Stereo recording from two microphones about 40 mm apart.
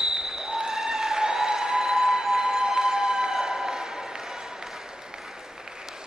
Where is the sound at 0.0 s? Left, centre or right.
Centre.